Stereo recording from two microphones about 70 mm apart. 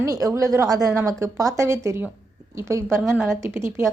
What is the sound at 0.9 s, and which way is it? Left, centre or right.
Speech, right.